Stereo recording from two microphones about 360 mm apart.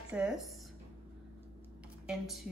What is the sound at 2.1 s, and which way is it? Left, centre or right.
Speech, centre.